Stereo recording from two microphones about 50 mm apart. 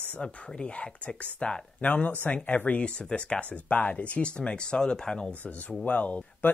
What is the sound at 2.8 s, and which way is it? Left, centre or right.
Speech, left.